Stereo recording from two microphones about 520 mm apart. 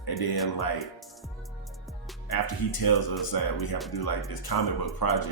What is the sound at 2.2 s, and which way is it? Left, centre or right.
Speech, left.